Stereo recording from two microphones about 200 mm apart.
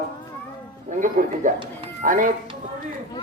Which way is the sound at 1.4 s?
40° right (ahead or behind).